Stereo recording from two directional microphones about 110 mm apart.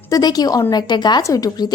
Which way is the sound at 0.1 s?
35° left (ahead or behind).